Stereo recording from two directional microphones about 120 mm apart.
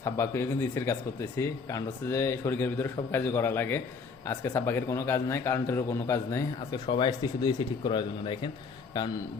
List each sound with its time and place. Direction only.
0.0 s speech: 25° left (ahead or behind); by 8.4 s 40° left (ahead or behind)